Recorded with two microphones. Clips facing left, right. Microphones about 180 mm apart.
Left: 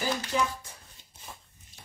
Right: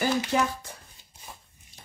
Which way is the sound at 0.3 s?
60° right (ahead or behind).